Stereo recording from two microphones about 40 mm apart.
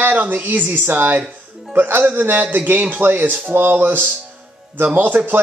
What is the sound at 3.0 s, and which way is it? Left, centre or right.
Speech, right.